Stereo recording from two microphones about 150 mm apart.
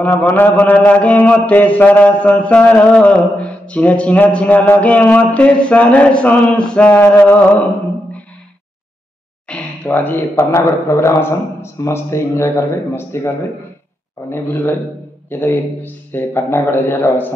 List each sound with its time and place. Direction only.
0.0 s mantra: 10° left (ahead or behind)
9.5 s a sound: 10° left (ahead or behind)
9.8 s mantra: 15° left (ahead or behind)
14.3 s mantra: 15° left (ahead or behind)